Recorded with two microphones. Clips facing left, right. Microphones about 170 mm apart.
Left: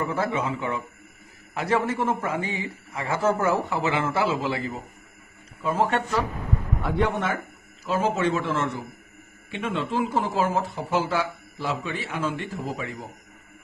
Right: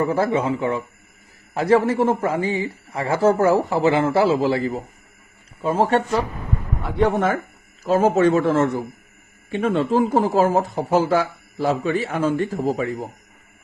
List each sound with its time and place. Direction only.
0.0 s speech: 35° right (ahead or behind)
7.9 s a man's voice: 45° right (ahead or behind)